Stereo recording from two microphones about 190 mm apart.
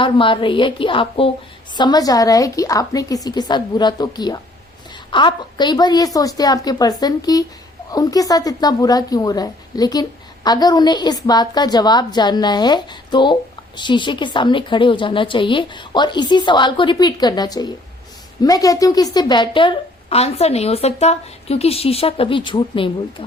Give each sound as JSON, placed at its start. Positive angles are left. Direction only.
{"t": 0.0, "sound": "a woman's voice", "side_deg": 25}